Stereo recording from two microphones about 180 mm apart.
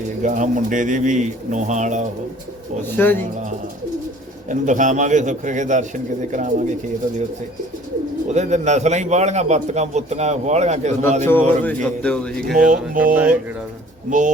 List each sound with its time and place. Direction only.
0.2 s speech: 45° right (ahead or behind)
2.9 s speech: 10° left (ahead or behind)
4.4 s speech: 45° right (ahead or behind)
8.3 s a man's voice: 40° right (ahead or behind)
11.6 s speech: 5° left (ahead or behind)
12.7 s speech: 50° right (ahead or behind)